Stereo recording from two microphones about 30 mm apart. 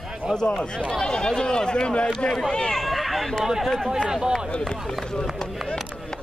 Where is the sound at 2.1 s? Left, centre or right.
Centre.